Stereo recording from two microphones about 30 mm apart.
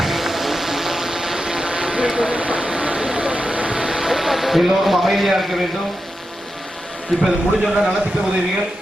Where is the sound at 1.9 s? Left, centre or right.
Right.